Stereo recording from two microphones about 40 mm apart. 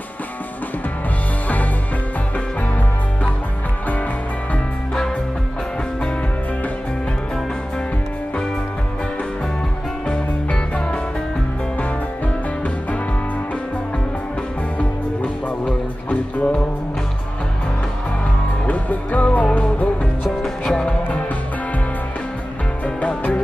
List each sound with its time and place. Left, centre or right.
10.0 s music: left
15.6 s music: left
18.7 s music: left
20.4 s music: left
23.0 s music: left